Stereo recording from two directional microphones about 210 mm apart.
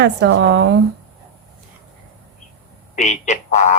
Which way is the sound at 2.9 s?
35° left (ahead or behind).